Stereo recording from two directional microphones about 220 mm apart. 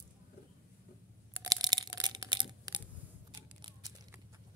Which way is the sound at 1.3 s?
15° right (ahead or behind).